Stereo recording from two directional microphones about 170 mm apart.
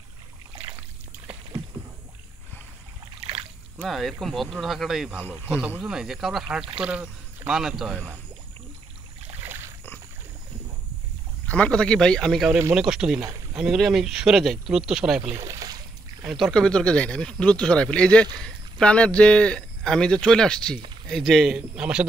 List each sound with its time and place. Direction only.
3.7 s speech: 5° right (ahead or behind)
11.4 s speech: 10° left (ahead or behind)
15.4 s boat: 20° right (ahead or behind)
16.3 s speech: centre (ahead or behind)